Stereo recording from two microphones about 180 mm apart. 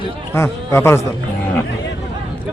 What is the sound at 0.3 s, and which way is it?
Speech, 15° left (ahead or behind).